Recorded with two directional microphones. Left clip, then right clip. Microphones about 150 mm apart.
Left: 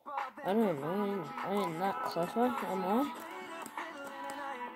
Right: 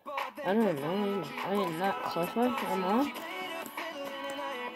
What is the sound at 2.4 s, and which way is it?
Speech, 15° right (ahead or behind).